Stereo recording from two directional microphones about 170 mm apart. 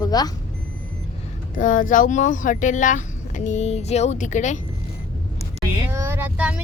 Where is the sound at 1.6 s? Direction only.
50° left (ahead or behind).